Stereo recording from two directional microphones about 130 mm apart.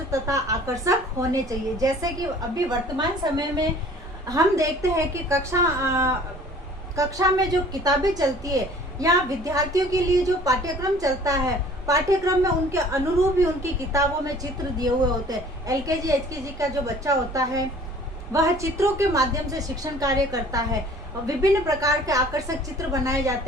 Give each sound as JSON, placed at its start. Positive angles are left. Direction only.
{"t": 0.1, "sound": "a woman's voice", "side_deg": -25}
{"t": 15.3, "sound": "a woman's voice", "side_deg": -25}